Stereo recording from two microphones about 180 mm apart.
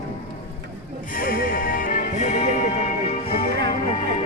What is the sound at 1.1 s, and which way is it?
Music, 50° left (ahead or behind).